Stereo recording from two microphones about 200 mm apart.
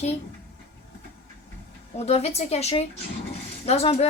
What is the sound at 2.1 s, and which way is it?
A woman's voice, 30° left (ahead or behind).